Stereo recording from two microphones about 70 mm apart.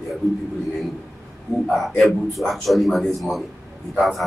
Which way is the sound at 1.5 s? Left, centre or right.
Left.